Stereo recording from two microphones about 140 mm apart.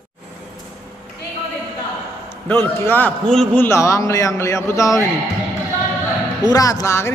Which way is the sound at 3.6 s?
20° left (ahead or behind).